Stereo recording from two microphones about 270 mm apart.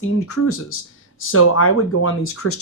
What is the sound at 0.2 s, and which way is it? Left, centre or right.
Speech, left.